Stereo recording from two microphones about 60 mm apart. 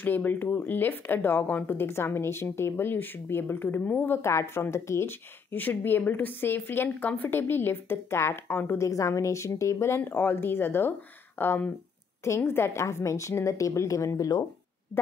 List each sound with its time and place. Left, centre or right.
0.0 s a woman's voice: left
1.9 s a woman's voice: left
5.6 s a woman's voice: left
8.7 s a woman's voice: left